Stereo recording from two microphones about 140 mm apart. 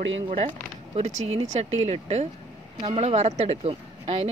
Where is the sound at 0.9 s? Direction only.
50° right (ahead or behind).